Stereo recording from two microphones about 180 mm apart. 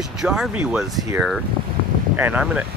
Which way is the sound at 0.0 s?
5° right (ahead or behind).